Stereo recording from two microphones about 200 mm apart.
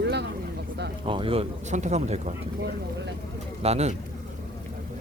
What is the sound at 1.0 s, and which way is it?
Speech, 25° right (ahead or behind).